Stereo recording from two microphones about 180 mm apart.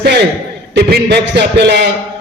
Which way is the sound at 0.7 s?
65° right (ahead or behind).